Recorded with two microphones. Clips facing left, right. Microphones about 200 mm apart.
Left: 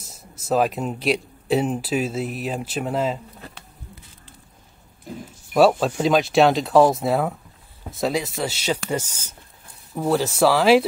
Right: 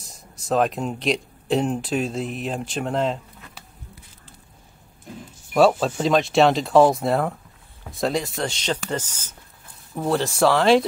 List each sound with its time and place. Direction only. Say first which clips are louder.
0.1 s speech: left 1 dB; 5° left (ahead or behind)
5.5 s speech: left 1 dB; centre (ahead or behind)